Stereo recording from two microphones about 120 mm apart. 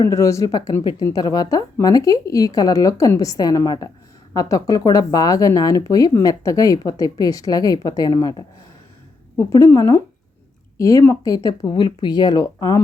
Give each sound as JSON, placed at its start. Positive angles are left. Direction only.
{"t": 0.1, "sound": "a woman's voice", "side_deg": 25}
{"t": 9.5, "sound": "a woman's voice", "side_deg": 30}